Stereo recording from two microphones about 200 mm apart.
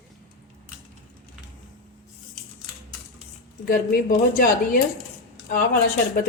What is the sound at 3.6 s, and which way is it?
Speech, 45° left (ahead or behind).